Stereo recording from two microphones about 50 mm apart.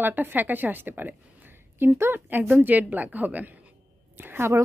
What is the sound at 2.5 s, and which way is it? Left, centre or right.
A woman's voice, right.